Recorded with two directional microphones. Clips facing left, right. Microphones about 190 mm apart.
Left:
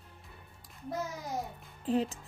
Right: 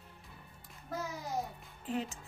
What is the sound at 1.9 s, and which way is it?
Speech, 35° left (ahead or behind).